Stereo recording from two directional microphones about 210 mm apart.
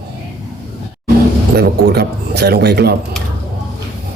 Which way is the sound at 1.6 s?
50° right (ahead or behind).